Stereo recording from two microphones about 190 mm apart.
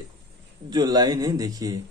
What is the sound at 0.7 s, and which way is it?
Speech, 20° right (ahead or behind).